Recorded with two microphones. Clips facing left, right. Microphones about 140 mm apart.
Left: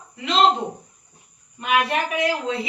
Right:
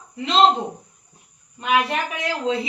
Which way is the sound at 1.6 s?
25° right (ahead or behind).